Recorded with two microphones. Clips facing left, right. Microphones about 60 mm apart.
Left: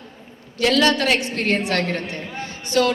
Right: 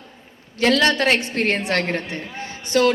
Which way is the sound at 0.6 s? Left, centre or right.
Right.